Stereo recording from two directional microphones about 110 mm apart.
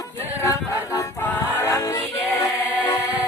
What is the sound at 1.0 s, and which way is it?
Music, 20° left (ahead or behind).